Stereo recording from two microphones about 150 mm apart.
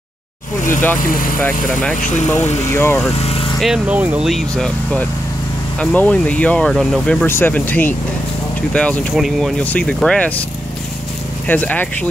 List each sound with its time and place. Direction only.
0.7 s speech: 15° left (ahead or behind)
1.0 s speech: 65° left (ahead or behind)
1.4 s speech: 10° left (ahead or behind)
2.0 s speech: 55° left (ahead or behind)
2.2 s speech: 20° left (ahead or behind)
3.2 s vehicle: 40° left (ahead or behind)
3.5 s speech: 5° right (ahead or behind)
4.3 s speech: 5° left (ahead or behind)
7.2 s speech: 15° left (ahead or behind)
11.4 s speech: 10° left (ahead or behind)